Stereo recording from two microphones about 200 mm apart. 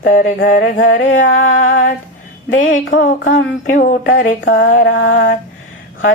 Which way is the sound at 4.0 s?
70° left (ahead or behind).